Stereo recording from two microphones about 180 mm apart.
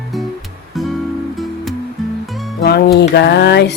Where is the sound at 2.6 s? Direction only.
60° left (ahead or behind).